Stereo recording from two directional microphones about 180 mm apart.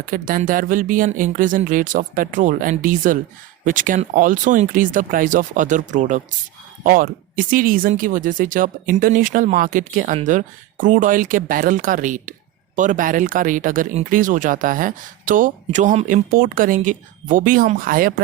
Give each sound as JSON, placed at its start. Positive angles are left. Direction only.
{"t": 0.0, "sound": "speech", "side_deg": -50}